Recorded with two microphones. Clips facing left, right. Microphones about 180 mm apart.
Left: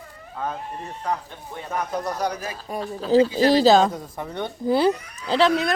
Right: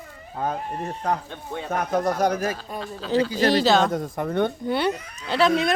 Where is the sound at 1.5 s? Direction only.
60° right (ahead or behind).